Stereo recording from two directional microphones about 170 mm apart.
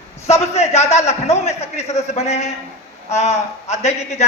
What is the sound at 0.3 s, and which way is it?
A man's voice, 40° left (ahead or behind).